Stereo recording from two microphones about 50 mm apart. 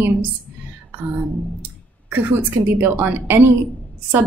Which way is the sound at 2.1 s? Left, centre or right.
Right.